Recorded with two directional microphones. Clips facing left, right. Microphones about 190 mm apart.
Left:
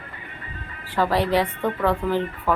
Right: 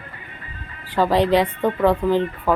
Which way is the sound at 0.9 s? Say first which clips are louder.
Right 4 dB; 15° right (ahead or behind).